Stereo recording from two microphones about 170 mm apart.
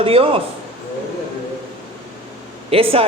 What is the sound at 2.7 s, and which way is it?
Speech, 35° right (ahead or behind).